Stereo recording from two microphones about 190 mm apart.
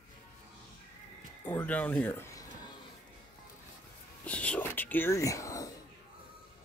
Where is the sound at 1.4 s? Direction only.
10° left (ahead or behind).